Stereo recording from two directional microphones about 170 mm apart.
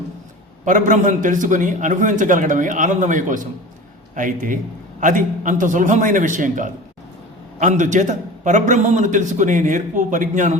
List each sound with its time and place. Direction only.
0.6 s a man's voice: 50° right (ahead or behind)